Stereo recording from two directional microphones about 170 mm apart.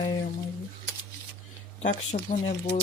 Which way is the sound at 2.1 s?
50° left (ahead or behind).